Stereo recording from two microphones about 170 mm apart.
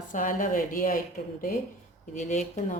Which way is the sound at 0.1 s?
50° left (ahead or behind).